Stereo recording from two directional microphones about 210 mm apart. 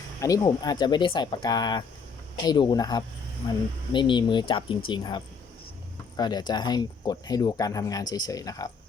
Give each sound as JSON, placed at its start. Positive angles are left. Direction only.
{"t": 0.2, "sound": "speech", "side_deg": 15}